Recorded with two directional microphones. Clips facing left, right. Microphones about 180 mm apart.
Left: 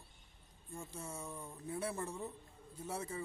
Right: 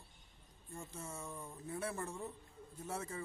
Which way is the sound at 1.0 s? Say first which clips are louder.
Left 1 dB; 15° left (ahead or behind).